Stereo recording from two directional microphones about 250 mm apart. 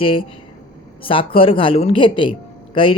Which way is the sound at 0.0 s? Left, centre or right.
Left.